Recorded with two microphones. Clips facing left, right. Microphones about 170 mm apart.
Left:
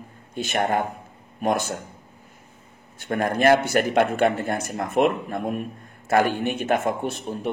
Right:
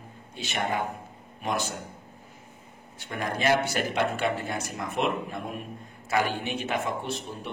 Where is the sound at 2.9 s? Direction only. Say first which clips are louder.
Left 8 dB; 50° left (ahead or behind).